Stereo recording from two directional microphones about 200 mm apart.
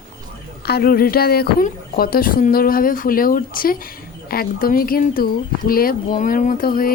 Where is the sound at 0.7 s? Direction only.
50° left (ahead or behind).